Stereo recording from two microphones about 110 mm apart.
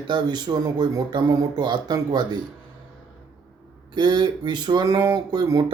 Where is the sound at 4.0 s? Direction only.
40° right (ahead or behind).